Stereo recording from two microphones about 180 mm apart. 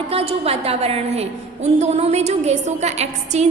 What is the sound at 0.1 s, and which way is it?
A woman's voice, 35° right (ahead or behind).